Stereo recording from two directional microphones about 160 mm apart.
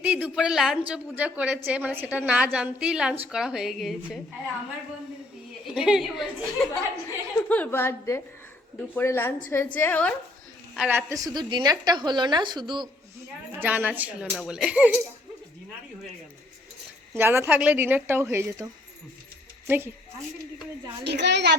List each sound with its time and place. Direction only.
0.0 s a woman's voice: 10° right (ahead or behind)
5.6 s a woman's voice: 5° right (ahead or behind)
7.4 s a woman's voice: 10° left (ahead or behind)
10.8 s a woman's voice: 10° right (ahead or behind); by 12.9 s 30° right (ahead or behind)
13.6 s a woman's voice: 10° right (ahead or behind)
17.2 s a woman's voice: 15° right (ahead or behind)
21.0 s a child's voice: 90° right